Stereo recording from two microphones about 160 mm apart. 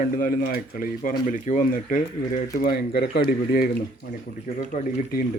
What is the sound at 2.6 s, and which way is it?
Speech, 70° left (ahead or behind).